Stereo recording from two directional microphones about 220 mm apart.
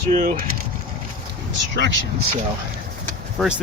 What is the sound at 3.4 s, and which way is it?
Speech, centre (ahead or behind).